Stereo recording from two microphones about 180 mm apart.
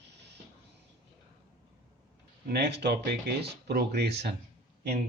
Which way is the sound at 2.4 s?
65° right (ahead or behind).